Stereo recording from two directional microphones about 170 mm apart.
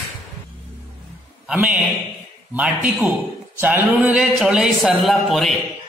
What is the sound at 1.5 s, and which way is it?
A man's voice, 10° right (ahead or behind).